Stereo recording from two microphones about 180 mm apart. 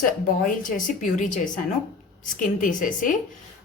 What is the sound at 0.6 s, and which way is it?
A woman's voice, 45° left (ahead or behind).